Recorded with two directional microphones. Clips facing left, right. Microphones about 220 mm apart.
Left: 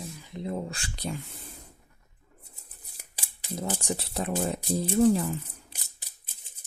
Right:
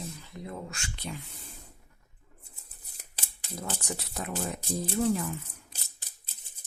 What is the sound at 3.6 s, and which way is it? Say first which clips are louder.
Speech: left 5 dB; 25° left (ahead or behind).